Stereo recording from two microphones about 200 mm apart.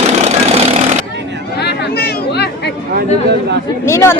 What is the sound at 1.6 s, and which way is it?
Chatter, 55° left (ahead or behind).